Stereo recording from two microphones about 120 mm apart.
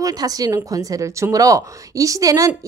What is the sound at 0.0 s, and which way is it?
A woman's voice, 30° right (ahead or behind).